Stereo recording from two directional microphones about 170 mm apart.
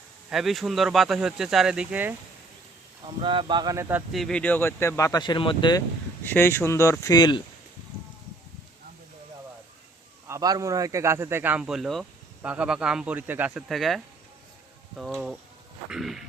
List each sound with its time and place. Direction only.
0.3 s speech: centre (ahead or behind)
3.2 s speech: 30° right (ahead or behind)
4.1 s speech: 5° left (ahead or behind); by 5.8 s 25° left (ahead or behind)
6.2 s speech: 15° left (ahead or behind)
10.2 s a man's voice: 20° right (ahead or behind); by 16.2 s centre (ahead or behind)